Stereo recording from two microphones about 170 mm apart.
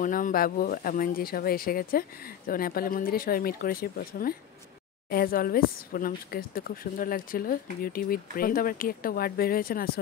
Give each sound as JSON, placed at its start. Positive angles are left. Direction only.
{"t": 0.0, "sound": "speech", "side_deg": 55}